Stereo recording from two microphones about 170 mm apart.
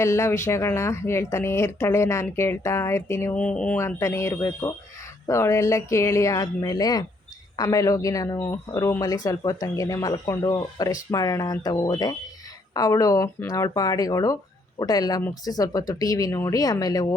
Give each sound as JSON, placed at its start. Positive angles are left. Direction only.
{"t": 0.0, "sound": "speech", "side_deg": 15}